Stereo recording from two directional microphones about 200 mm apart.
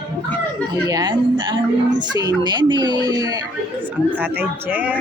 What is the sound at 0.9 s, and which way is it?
Speech, 20° right (ahead or behind).